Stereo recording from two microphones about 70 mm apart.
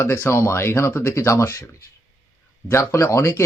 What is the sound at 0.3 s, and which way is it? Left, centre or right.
Speech, left.